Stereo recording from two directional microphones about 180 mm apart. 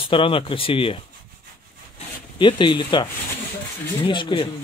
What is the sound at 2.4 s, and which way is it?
Speech, 25° left (ahead or behind).